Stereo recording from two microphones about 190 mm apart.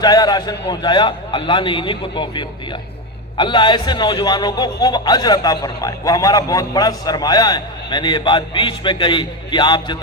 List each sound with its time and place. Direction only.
0.0 s a man's voice: 20° left (ahead or behind)